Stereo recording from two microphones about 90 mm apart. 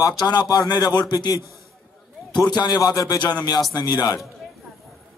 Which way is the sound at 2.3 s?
50° left (ahead or behind).